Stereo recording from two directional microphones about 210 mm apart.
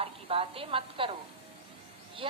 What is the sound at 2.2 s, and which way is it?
Speech, 25° right (ahead or behind).